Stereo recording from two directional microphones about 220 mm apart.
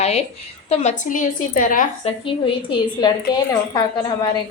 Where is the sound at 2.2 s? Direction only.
20° left (ahead or behind).